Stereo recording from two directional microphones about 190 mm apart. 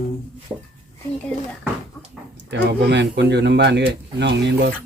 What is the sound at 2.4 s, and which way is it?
Speech, 65° right (ahead or behind).